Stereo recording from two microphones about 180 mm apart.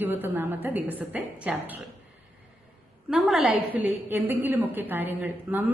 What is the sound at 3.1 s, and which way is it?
A woman's voice, centre (ahead or behind).